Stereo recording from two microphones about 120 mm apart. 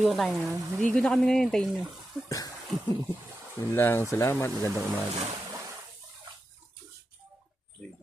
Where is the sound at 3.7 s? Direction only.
20° left (ahead or behind).